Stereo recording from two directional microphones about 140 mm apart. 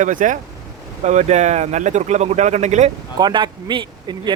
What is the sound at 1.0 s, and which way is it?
A man's voice, 55° right (ahead or behind).